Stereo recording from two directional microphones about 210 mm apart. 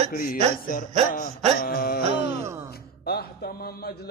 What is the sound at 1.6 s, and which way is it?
Speech, 45° left (ahead or behind).